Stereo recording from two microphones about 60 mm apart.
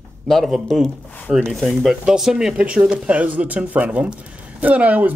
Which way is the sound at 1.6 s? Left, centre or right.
Centre.